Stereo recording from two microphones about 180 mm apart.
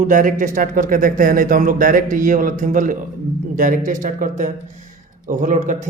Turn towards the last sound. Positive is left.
turn(degrees=-45)  # may be behind; listen again after turning